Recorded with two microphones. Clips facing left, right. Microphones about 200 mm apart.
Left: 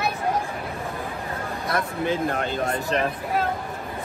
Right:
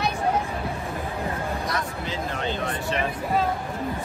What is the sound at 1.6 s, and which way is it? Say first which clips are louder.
Speech: left 4 dB; 55° left (ahead or behind).